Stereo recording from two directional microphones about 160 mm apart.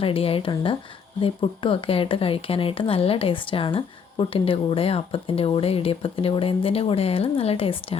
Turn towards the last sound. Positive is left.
turn(degrees=35)  # may be behind; listen again after turning